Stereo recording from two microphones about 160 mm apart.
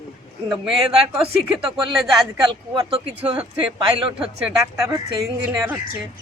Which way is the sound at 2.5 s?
30° right (ahead or behind).